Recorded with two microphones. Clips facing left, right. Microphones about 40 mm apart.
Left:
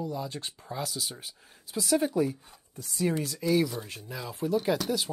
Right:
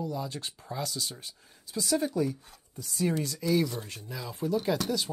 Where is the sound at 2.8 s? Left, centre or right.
Centre.